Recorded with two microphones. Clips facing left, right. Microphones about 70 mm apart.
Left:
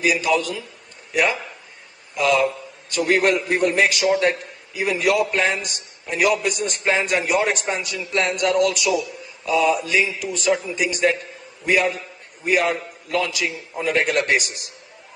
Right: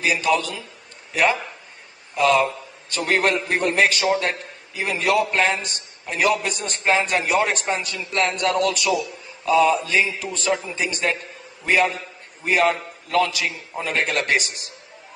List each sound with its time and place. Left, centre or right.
0.0 s a man's voice: right
2.1 s a man's voice: right